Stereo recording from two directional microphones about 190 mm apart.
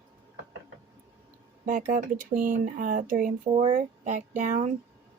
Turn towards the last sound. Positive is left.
turn(degrees=-40)  # may be behind; listen again after turning